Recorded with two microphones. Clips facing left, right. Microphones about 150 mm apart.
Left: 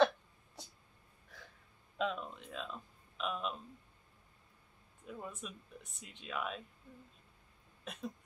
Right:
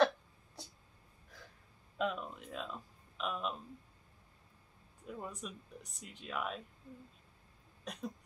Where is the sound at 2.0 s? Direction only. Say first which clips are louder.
Right 1 dB; 5° right (ahead or behind).